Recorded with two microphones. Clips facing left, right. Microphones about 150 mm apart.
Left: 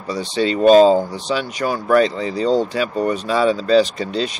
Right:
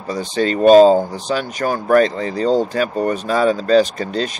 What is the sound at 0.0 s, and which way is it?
Speech, 45° right (ahead or behind).